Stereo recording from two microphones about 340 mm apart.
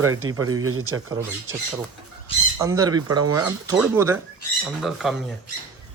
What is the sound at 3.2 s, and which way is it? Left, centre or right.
Speech, right.